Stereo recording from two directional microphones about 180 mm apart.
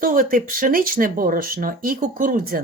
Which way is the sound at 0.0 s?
50° right (ahead or behind).